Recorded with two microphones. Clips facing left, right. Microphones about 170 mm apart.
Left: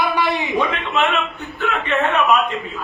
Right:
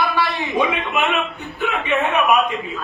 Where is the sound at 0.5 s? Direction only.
15° right (ahead or behind).